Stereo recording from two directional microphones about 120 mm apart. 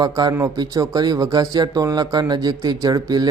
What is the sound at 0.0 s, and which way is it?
A man's voice, 35° right (ahead or behind).